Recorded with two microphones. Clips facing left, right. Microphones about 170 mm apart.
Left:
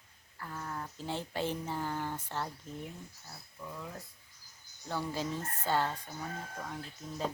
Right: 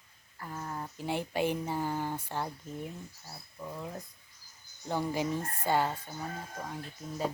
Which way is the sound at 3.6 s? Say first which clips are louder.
Right 4 dB; 20° right (ahead or behind).